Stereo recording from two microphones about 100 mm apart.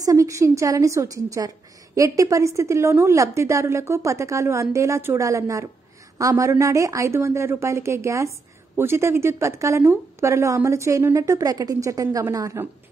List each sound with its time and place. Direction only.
0.0 s a woman's voice: 35° right (ahead or behind)